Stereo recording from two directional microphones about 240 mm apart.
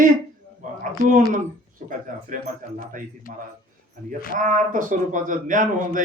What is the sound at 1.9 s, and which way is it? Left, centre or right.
Speech, right.